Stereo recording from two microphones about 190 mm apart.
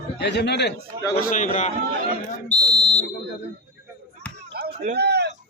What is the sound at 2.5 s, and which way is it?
Fire alarm, 20° right (ahead or behind).